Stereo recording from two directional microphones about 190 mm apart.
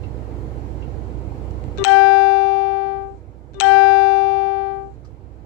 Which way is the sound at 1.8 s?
65° left (ahead or behind).